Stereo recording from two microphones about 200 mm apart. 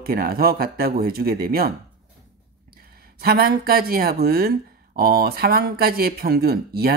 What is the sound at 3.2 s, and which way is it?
Speech, 50° right (ahead or behind).